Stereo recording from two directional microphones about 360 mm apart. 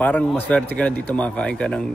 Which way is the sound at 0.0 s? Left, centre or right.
Centre.